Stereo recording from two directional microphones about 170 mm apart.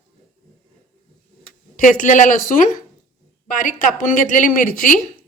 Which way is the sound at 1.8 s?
50° left (ahead or behind).